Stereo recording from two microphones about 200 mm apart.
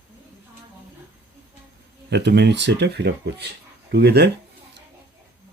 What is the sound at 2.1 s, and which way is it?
Speech, 55° right (ahead or behind).